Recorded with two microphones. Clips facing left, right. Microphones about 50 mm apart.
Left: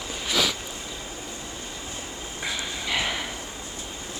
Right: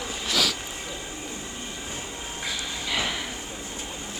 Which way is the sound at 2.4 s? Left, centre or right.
Centre.